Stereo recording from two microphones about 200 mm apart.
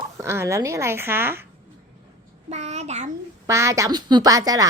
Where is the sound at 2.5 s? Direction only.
35° right (ahead or behind).